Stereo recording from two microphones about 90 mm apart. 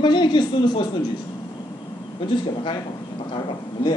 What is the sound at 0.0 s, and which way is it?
Speech, 60° left (ahead or behind).